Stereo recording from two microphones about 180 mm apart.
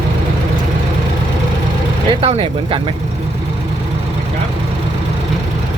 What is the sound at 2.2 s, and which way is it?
Speech, 30° right (ahead or behind).